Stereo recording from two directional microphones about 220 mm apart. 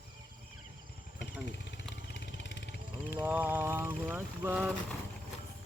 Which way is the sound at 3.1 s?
10° right (ahead or behind).